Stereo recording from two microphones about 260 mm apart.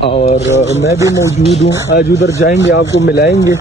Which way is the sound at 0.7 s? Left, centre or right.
Centre.